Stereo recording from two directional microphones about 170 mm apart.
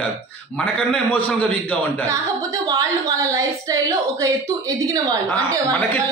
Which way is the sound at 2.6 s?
20° right (ahead or behind).